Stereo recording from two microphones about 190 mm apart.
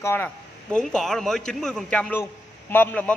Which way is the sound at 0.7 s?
Centre (ahead or behind).